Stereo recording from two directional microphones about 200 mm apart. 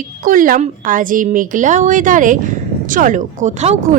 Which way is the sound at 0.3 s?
45° right (ahead or behind).